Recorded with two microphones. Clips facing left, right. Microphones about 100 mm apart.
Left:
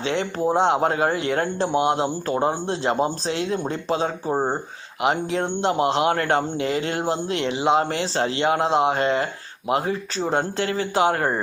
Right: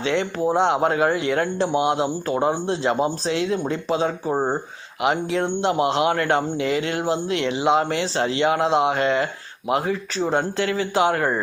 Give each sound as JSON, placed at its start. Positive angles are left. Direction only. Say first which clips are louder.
{"t": 0.0, "sound": "speech", "louder": "right 2 dB", "side_deg": 35}
{"t": 0.4, "sound": "speech", "louder": "left 1 dB", "side_deg": 25}
{"t": 0.8, "sound": "speech", "louder": "right 1 dB", "side_deg": 35}